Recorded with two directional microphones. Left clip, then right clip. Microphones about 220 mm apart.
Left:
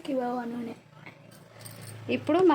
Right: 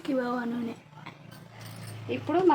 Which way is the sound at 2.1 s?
45° left (ahead or behind).